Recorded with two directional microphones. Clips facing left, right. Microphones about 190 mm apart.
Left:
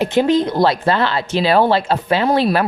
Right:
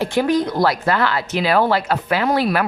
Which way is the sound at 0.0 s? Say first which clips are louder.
Left 3 dB; 20° left (ahead or behind).